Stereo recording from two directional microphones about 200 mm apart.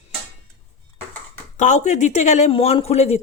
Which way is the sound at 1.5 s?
35° left (ahead or behind).